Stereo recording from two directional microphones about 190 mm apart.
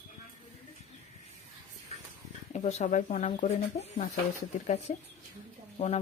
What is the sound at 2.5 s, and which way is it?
A woman's voice, 35° left (ahead or behind).